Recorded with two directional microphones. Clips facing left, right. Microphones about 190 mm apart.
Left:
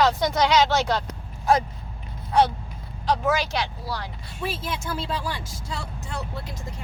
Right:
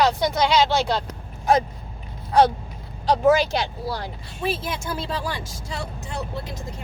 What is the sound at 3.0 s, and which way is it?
Speech, 35° right (ahead or behind).